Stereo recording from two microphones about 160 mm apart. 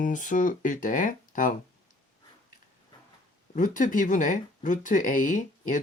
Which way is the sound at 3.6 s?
55° left (ahead or behind).